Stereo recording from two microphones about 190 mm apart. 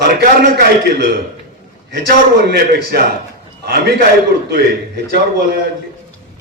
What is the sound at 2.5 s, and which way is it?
A man's voice, 55° right (ahead or behind).